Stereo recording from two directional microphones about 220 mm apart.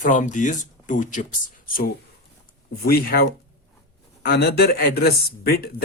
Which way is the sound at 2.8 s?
45° left (ahead or behind).